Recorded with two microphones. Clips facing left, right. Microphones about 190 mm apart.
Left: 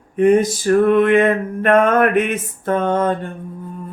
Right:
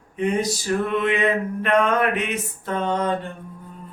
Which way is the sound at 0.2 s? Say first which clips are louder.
Left 9 dB; 50° left (ahead or behind).